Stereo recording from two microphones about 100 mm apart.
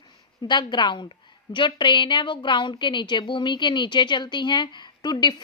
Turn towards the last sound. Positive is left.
turn(degrees=45)  # may be behind; listen again after turning